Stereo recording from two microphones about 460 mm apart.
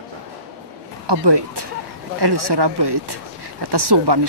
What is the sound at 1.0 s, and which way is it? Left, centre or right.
Speech, right.